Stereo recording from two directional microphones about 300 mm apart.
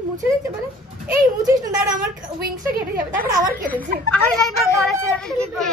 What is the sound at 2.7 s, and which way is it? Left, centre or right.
A woman's voice, right.